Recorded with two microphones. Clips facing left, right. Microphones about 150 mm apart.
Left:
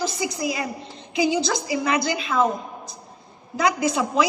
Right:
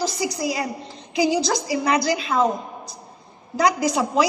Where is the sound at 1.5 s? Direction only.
20° left (ahead or behind).